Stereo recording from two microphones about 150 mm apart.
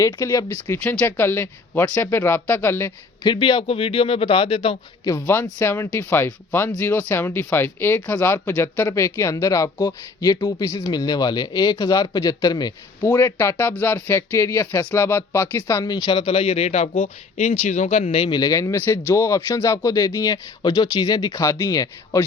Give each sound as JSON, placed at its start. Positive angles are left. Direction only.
{"t": 0.0, "sound": "speech", "side_deg": 20}
{"t": 3.2, "sound": "a man's voice", "side_deg": 30}
{"t": 5.0, "sound": "a man's voice", "side_deg": 20}
{"t": 18.3, "sound": "a man's voice", "side_deg": 25}